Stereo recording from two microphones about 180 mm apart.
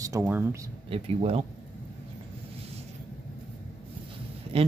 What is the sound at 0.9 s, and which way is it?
Speech, 35° right (ahead or behind).